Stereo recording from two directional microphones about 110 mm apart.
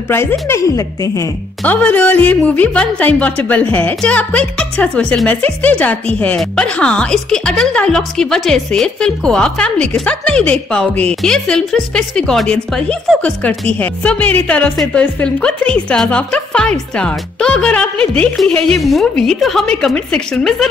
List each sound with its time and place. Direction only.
0.1 s a woman's voice: 20° left (ahead or behind)
1.6 s a woman's voice: 10° left (ahead or behind)